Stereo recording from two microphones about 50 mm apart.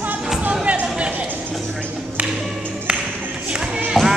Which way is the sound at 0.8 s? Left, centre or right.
Right.